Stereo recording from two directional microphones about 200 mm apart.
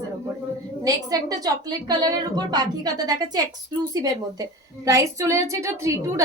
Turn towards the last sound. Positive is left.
turn(degrees=-15)  # may be behind; listen again after turning